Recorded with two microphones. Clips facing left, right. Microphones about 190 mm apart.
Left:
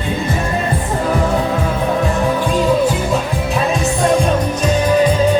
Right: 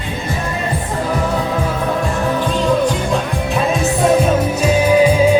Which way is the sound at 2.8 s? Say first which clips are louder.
Left 1 dB; centre (ahead or behind).